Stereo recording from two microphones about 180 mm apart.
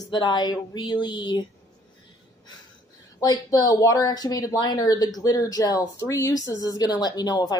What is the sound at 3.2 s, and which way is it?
Speech, 20° left (ahead or behind).